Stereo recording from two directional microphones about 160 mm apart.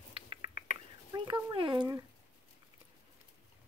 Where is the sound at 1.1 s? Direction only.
30° right (ahead or behind).